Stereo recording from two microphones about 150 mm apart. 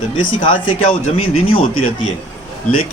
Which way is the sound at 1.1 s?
35° left (ahead or behind).